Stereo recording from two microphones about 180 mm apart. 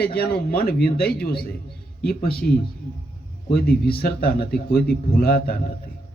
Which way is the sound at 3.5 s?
60° left (ahead or behind).